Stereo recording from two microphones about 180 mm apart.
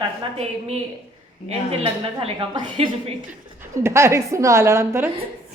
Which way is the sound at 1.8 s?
30° right (ahead or behind).